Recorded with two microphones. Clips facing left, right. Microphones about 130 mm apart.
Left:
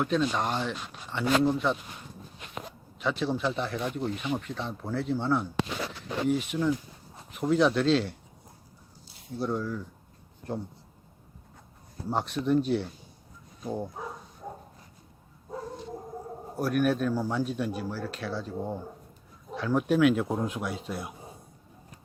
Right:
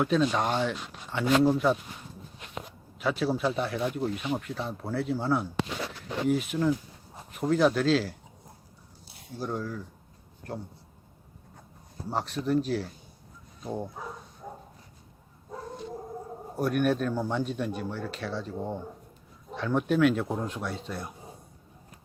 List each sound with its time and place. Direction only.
0.0 s speech: centre (ahead or behind)
3.0 s speech: 5° right (ahead or behind)
9.4 s speech: 10° right (ahead or behind)
12.3 s speech: centre (ahead or behind)
16.6 s speech: centre (ahead or behind)